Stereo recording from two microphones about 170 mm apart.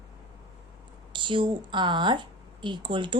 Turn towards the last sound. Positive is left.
turn(degrees=-30)  # may be behind; listen again after turning